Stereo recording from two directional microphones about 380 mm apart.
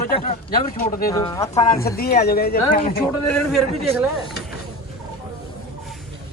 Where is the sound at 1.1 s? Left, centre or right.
Centre.